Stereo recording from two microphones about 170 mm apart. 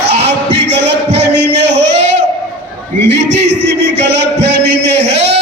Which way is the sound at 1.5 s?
90° right.